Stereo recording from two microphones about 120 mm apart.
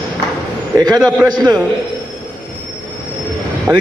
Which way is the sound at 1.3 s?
35° right (ahead or behind).